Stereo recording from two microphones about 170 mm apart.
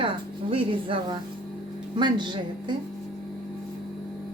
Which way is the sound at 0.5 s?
30° right (ahead or behind).